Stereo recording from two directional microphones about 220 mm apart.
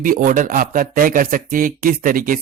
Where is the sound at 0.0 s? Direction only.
35° right (ahead or behind).